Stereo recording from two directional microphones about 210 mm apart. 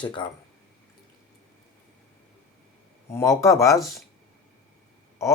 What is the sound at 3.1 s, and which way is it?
Speech, 15° left (ahead or behind).